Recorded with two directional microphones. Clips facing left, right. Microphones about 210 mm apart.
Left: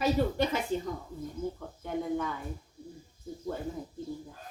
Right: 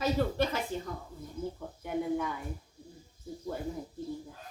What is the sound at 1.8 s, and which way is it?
Speech, 10° right (ahead or behind).